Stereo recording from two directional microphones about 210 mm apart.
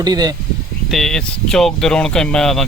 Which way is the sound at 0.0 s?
20° right (ahead or behind).